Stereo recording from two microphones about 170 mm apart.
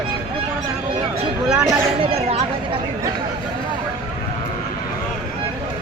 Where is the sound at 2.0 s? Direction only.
35° right (ahead or behind).